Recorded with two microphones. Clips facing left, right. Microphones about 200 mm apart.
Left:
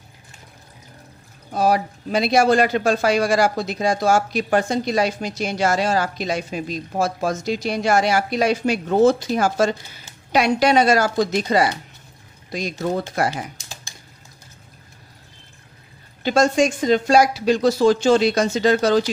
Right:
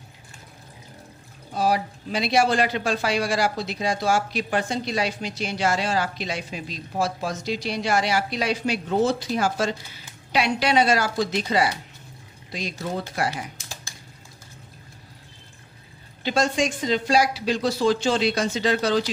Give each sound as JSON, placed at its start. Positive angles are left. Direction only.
{"t": 1.5, "sound": "speech", "side_deg": 45}
{"t": 16.2, "sound": "speech", "side_deg": 45}